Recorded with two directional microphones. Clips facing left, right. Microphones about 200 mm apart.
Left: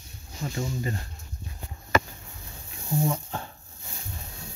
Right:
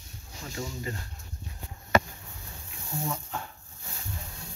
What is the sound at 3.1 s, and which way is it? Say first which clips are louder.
Speech: left 4 dB; 30° left (ahead or behind).